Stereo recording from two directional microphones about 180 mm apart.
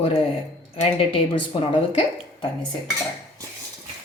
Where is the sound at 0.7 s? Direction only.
30° left (ahead or behind).